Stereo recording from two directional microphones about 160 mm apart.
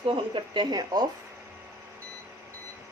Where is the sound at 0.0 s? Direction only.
30° right (ahead or behind).